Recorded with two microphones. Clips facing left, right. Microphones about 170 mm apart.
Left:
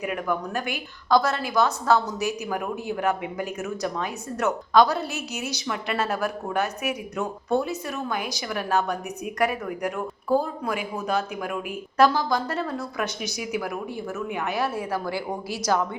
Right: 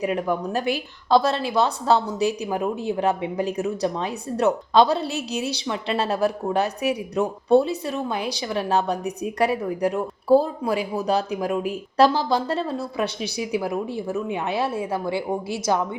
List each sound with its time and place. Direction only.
0.0 s a woman's voice: 30° right (ahead or behind)